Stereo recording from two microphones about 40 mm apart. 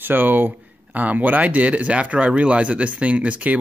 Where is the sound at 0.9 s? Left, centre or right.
Right.